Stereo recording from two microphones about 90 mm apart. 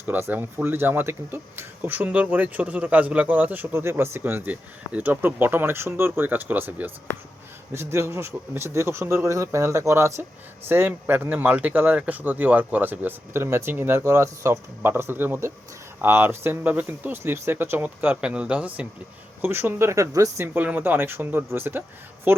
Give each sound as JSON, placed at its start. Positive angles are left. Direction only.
{"t": 0.1, "sound": "speech", "side_deg": -20}
{"t": 19.4, "sound": "speech", "side_deg": -25}
{"t": 20.4, "sound": "speech", "side_deg": -15}